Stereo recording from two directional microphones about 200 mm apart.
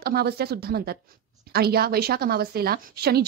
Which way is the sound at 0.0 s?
50° right (ahead or behind).